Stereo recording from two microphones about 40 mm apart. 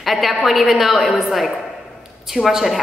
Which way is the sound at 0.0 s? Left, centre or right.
Centre.